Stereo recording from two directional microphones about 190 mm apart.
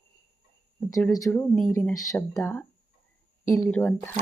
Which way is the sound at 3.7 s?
5° left (ahead or behind).